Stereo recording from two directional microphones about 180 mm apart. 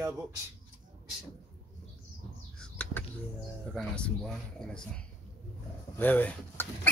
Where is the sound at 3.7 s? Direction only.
5° left (ahead or behind).